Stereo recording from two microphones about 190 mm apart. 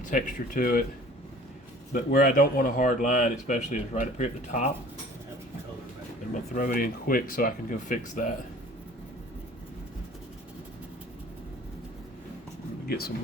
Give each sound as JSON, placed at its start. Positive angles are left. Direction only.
{"t": 0.0, "sound": "speech", "side_deg": 45}
{"t": 1.9, "sound": "speech", "side_deg": 50}
{"t": 6.5, "sound": "speech", "side_deg": 45}
{"t": 12.9, "sound": "speech", "side_deg": 55}